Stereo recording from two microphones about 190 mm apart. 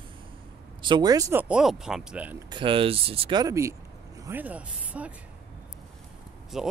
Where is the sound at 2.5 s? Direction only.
25° right (ahead or behind); by 5.1 s 10° right (ahead or behind).